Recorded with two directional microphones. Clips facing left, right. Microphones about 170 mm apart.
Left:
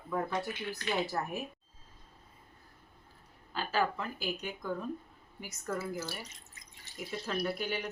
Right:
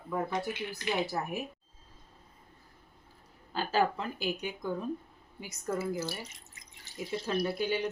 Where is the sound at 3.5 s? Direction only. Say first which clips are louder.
Right 3 dB; 35° right (ahead or behind).